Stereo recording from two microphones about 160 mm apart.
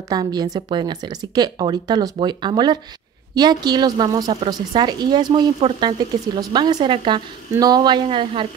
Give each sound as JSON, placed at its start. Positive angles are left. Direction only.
{"t": 0.1, "sound": "speech", "side_deg": -25}